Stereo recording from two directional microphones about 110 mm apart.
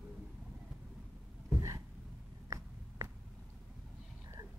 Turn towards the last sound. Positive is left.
turn(degrees=-30)  # may be behind; listen again after turning